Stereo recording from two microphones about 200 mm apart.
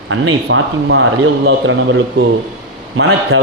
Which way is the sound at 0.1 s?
80° right.